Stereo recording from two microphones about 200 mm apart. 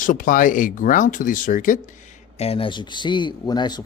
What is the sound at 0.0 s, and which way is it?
Speech, 40° left (ahead or behind).